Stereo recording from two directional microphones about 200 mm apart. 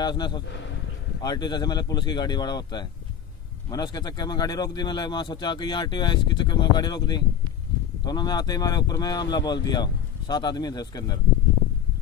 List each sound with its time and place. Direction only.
0.0 s speech: 20° left (ahead or behind)